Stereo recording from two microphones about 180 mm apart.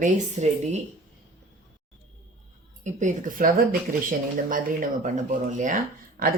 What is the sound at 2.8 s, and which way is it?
Speech, 40° right (ahead or behind).